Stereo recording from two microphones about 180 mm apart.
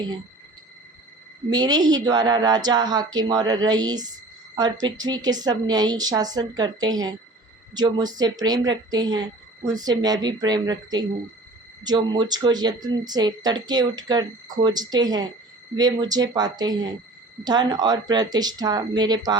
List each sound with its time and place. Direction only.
1.5 s a woman's voice: 20° right (ahead or behind)